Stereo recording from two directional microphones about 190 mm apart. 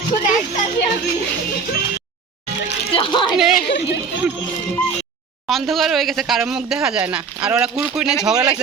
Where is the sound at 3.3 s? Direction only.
Centre (ahead or behind).